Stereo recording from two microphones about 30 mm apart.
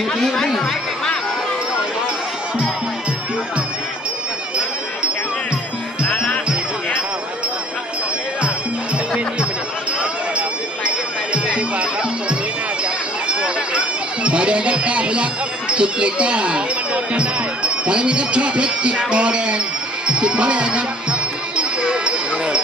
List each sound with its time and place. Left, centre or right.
11.4 s music: right
13.2 s a sound: right
14.3 s speech: right
20.1 s music: right